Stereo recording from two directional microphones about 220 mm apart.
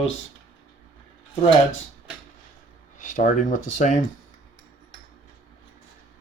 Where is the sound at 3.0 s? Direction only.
35° left (ahead or behind).